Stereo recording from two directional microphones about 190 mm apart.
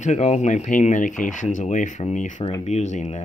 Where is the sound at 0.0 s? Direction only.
40° left (ahead or behind).